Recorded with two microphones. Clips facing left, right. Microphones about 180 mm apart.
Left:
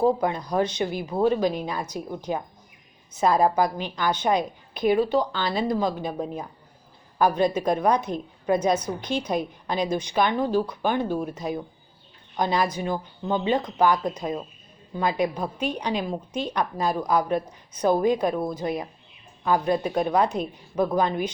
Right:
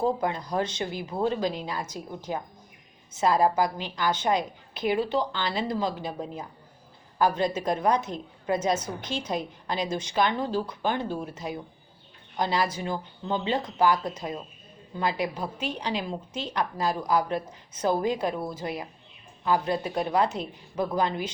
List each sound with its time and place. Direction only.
0.3 s a woman's voice: 15° left (ahead or behind)
4.9 s speech: 40° left (ahead or behind)
5.6 s a woman's voice: 15° left (ahead or behind)